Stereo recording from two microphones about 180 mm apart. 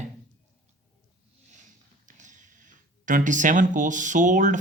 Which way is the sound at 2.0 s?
45° right (ahead or behind).